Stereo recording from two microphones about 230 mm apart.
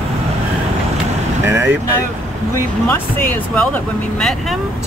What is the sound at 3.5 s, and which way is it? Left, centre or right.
Speech, centre.